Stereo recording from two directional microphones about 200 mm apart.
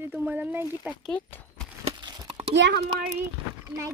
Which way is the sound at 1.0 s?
5° left (ahead or behind).